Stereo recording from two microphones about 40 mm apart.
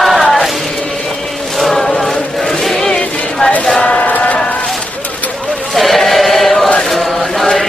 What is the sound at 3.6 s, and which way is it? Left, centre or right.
Chant, centre.